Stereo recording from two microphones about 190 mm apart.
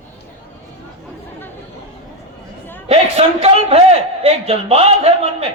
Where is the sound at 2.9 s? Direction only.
30° right (ahead or behind).